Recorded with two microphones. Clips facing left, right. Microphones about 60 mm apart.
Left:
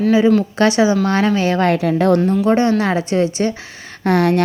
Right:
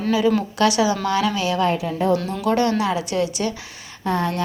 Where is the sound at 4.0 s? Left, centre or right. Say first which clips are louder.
Left 8 dB; left.